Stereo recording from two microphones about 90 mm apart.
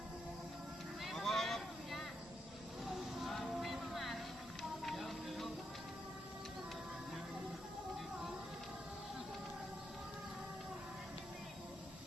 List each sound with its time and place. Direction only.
1.0 s vehicle: centre (ahead or behind)
4.8 s music: centre (ahead or behind)